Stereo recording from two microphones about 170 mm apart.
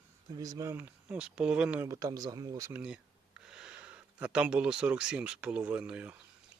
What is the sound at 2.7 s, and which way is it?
Speech, 5° right (ahead or behind).